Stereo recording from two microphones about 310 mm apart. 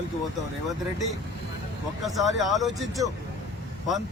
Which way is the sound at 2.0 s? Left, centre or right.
Centre.